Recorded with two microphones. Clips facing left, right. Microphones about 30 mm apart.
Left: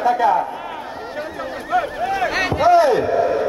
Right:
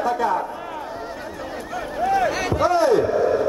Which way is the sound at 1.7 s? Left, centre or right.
Left.